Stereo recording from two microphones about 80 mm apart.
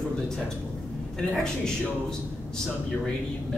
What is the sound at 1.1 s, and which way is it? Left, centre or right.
A man's voice, centre.